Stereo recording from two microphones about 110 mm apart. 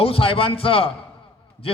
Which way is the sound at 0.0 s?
60° left (ahead or behind).